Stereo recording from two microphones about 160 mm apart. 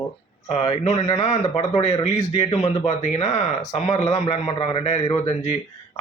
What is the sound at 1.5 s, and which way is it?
A man's voice, 40° left (ahead or behind).